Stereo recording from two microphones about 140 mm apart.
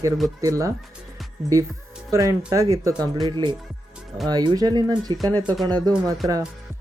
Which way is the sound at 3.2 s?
35° right (ahead or behind).